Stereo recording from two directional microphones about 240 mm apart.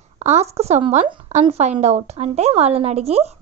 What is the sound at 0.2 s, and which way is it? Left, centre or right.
A woman's voice, right.